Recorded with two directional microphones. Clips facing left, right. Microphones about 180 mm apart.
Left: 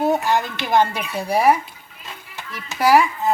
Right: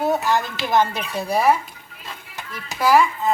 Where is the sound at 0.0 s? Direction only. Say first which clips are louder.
Left 1 dB; 20° left (ahead or behind).